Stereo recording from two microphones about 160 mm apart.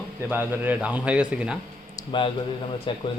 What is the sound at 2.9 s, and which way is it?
Speech, 30° left (ahead or behind).